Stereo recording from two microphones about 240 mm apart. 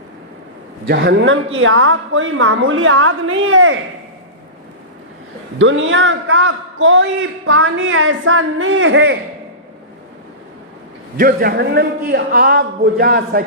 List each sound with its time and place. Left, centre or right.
0.9 s a man's voice: right
5.5 s a man's voice: right
11.2 s a man's voice: right